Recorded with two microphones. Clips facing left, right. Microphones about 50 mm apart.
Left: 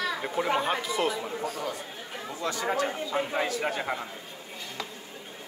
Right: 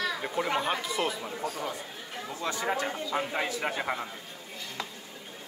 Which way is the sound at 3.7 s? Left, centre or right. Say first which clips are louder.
Even; centre.